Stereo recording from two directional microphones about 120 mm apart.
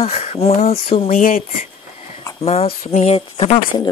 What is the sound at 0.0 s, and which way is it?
Speech, 60° left (ahead or behind).